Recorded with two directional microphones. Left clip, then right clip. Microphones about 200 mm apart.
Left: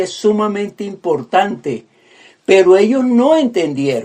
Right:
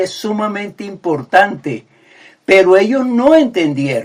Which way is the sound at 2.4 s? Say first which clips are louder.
Even; 25° left (ahead or behind).